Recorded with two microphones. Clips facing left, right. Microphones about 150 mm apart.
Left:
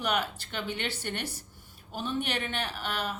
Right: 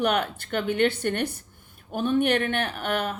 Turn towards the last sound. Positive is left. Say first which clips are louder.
# right 6 dB
turn(degrees=-55)  # may be behind; listen again after turning